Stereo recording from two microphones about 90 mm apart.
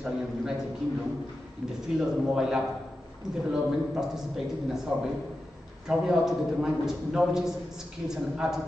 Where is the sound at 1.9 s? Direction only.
5° right (ahead or behind).